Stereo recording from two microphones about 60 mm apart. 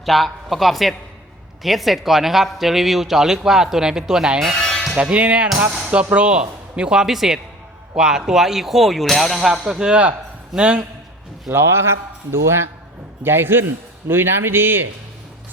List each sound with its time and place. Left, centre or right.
0.0 s speech: centre
4.5 s music: centre
4.9 s speech: right
11.5 s a man's voice: right